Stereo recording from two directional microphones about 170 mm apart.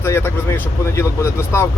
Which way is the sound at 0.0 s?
15° left (ahead or behind).